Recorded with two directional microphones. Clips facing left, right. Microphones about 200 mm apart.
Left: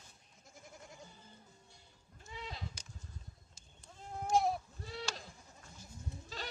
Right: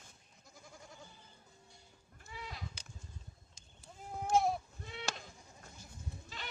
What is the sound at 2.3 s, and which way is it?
Goat, 25° left (ahead or behind).